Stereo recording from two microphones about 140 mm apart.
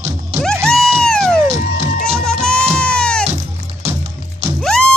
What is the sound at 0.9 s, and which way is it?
Cat, 5° left (ahead or behind).